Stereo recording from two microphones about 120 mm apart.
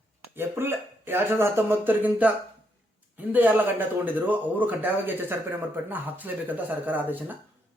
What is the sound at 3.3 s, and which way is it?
A man's voice, 15° right (ahead or behind).